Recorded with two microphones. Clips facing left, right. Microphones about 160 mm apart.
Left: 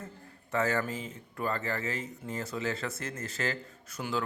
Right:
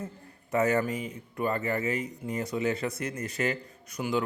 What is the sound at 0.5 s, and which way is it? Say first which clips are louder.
A man's voice: right 4 dB; 20° right (ahead or behind).